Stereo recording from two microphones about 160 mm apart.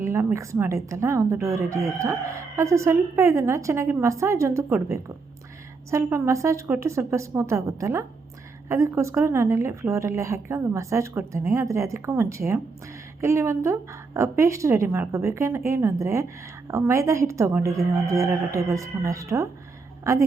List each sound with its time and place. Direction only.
0.0 s a woman's voice: 15° right (ahead or behind)